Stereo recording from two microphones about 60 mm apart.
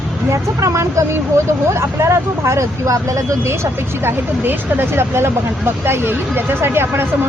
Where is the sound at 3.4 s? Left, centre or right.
Right.